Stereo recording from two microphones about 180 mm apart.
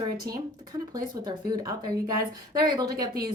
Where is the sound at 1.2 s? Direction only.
25° right (ahead or behind).